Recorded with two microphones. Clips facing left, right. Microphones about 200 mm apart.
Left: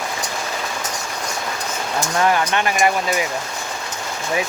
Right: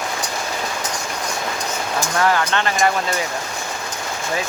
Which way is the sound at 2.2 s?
15° left (ahead or behind).